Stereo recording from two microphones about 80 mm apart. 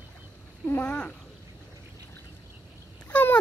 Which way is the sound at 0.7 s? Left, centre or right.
Left.